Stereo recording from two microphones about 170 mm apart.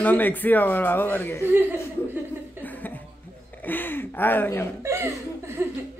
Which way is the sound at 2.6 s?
10° left (ahead or behind).